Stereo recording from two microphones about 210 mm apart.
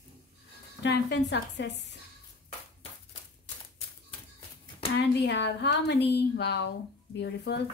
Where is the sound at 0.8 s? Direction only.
55° left (ahead or behind).